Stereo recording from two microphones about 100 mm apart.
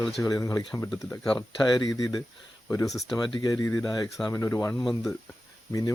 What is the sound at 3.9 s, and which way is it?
Speech, 40° left (ahead or behind).